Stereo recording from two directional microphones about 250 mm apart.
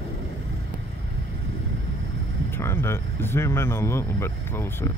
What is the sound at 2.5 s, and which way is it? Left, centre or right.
Speech, centre.